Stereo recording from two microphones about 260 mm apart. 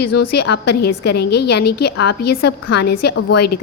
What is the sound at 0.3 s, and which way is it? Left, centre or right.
A woman's voice, left.